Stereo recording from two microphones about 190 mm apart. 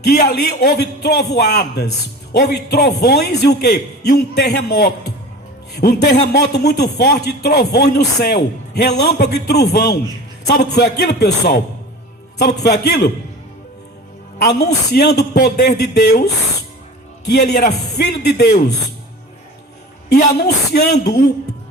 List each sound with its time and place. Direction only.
0.0 s a man's voice: 55° left (ahead or behind)
14.3 s a man's voice: 60° left (ahead or behind)
17.2 s a man's voice: 60° left (ahead or behind)
20.1 s a man's voice: 60° left (ahead or behind)